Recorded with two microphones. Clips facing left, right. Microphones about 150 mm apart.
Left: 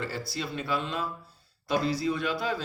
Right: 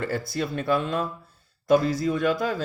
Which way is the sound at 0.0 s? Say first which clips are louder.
Right 6 dB; 50° right (ahead or behind).